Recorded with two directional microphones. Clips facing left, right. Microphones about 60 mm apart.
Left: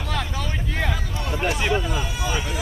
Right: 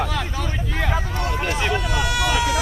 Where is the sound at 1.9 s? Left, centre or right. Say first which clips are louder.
Right 5 dB; right.